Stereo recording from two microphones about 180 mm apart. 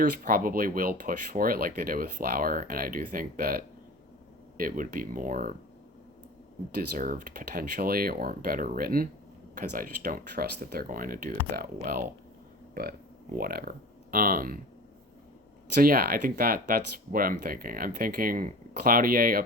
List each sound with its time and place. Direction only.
0.0 s speech: 50° right (ahead or behind)
6.9 s speech: 50° right (ahead or behind)
13.3 s speech: 55° right (ahead or behind)
15.8 s speech: 55° right (ahead or behind)